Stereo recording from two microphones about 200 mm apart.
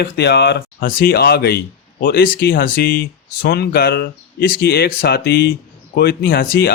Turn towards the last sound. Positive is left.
turn(degrees=50)  # may be behind; listen again after turning